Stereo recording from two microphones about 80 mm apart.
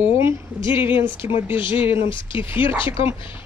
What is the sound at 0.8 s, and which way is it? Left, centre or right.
Speech, right.